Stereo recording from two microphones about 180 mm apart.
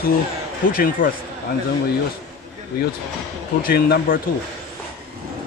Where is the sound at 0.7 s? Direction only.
55° left (ahead or behind).